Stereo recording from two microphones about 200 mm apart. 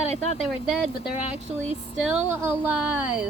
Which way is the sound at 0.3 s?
Centre (ahead or behind).